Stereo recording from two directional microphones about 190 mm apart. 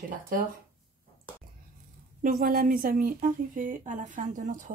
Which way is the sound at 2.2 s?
45° right (ahead or behind).